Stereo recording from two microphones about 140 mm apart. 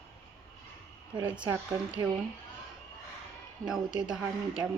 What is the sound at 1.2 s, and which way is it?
Speech, 10° right (ahead or behind).